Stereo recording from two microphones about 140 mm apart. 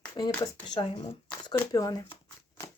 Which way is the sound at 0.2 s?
30° left (ahead or behind).